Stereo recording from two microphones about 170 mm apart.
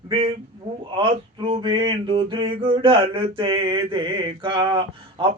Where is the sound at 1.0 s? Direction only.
30° right (ahead or behind).